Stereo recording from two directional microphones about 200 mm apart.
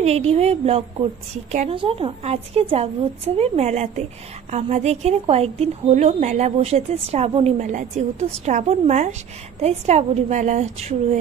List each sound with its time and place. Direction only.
0.0 s a woman's voice: 30° right (ahead or behind)